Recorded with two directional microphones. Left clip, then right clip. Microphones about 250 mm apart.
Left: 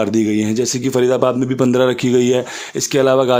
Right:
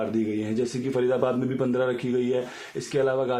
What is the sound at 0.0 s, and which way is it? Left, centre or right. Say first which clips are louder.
Speech: left 11 dB; left.